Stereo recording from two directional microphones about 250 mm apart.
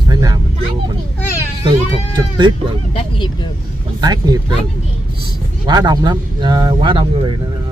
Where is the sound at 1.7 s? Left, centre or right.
Centre.